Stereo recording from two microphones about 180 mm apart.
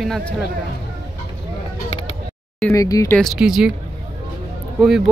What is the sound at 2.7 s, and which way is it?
Speech, 20° left (ahead or behind).